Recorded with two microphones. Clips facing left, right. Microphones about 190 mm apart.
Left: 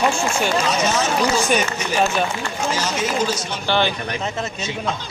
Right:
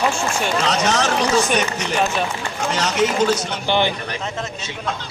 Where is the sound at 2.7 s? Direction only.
70° right (ahead or behind).